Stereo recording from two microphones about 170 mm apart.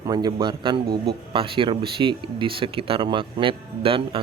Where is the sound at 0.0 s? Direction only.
25° right (ahead or behind).